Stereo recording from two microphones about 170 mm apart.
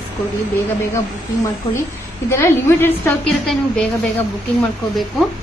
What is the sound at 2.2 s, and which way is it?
Speech, 15° left (ahead or behind).